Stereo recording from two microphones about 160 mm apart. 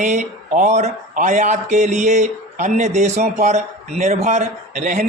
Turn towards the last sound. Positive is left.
turn(degrees=-50)  # may be behind; listen again after turning